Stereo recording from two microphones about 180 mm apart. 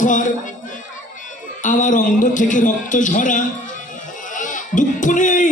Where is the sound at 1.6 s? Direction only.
45° left (ahead or behind).